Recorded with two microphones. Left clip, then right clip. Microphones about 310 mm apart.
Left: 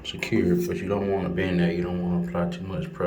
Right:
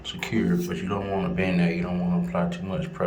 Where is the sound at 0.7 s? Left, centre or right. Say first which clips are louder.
Left 3 dB; centre.